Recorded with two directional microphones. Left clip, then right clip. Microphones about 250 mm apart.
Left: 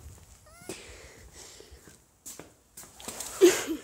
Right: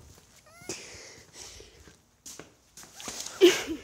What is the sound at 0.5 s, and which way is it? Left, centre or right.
Cat, centre.